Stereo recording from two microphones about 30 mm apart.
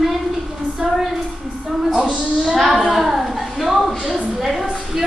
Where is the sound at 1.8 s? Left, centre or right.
Centre.